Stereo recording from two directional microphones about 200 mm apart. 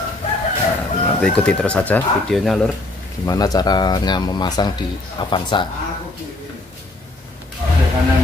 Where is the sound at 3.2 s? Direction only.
20° left (ahead or behind).